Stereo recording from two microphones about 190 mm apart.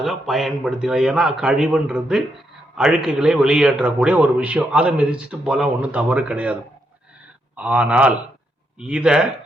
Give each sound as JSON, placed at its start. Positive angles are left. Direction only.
{"t": 0.0, "sound": "a man's voice", "side_deg": 0}